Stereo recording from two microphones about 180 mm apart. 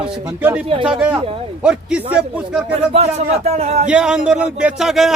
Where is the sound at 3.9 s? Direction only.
5° right (ahead or behind).